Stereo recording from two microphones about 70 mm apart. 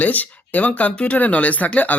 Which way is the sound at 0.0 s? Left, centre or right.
Left.